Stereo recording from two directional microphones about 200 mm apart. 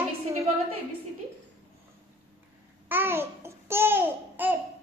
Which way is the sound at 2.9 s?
10° right (ahead or behind).